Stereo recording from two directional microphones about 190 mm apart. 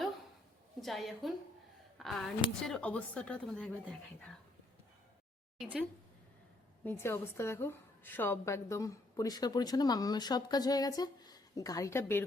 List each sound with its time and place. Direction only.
0.8 s a woman's voice: centre (ahead or behind)
5.5 s a woman's voice: 5° right (ahead or behind)
6.8 s a woman's voice: 10° left (ahead or behind)